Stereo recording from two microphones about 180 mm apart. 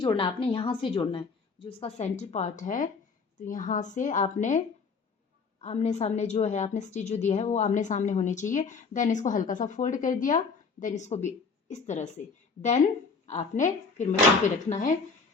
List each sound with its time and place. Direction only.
0.0 s a woman's voice: 25° left (ahead or behind)
13.2 s a woman's voice: 40° left (ahead or behind)